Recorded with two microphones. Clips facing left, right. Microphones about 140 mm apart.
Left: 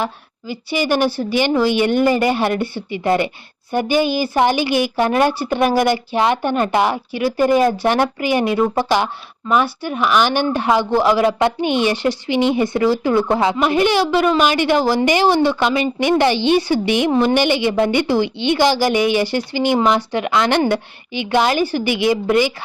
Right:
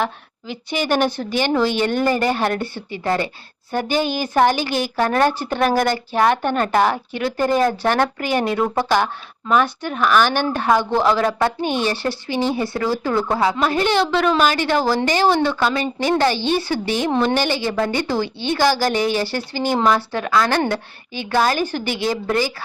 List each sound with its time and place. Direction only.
0.0 s a woman's voice: 5° left (ahead or behind)